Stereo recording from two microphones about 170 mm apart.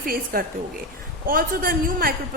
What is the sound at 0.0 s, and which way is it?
A woman's voice, 60° right (ahead or behind).